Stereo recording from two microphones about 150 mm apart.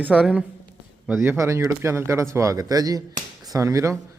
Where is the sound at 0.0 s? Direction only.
10° right (ahead or behind).